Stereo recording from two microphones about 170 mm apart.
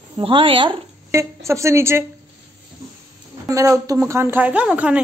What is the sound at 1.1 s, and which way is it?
Speech, 15° right (ahead or behind).